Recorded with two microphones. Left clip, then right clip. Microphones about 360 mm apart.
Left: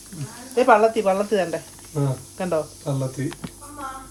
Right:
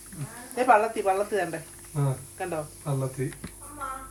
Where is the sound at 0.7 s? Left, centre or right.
Left.